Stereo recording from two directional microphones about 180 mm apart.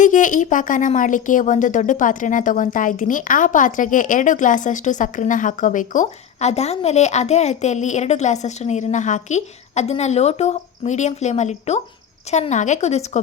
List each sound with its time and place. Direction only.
0.0 s speech: 45° left (ahead or behind)